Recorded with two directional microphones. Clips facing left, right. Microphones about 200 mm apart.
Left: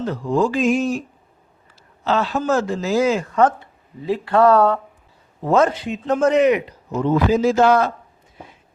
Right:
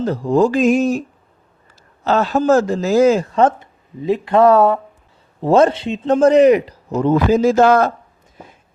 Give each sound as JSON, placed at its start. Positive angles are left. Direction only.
{"t": 0.0, "sound": "speech", "side_deg": -35}
{"t": 2.0, "sound": "speech", "side_deg": -45}
{"t": 3.3, "sound": "speech", "side_deg": -25}
{"t": 5.4, "sound": "speech", "side_deg": -30}